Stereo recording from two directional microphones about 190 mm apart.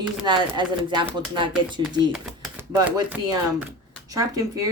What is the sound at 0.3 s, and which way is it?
Speech, 25° right (ahead or behind).